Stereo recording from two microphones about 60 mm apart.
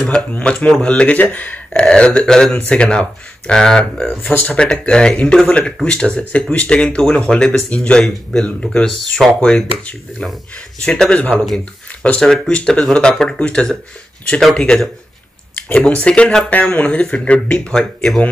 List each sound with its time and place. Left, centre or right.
0.4 s speech: centre
1.7 s speech: centre
4.2 s speech: left
4.6 s speech: centre
10.8 s speech: centre
15.8 s speech: centre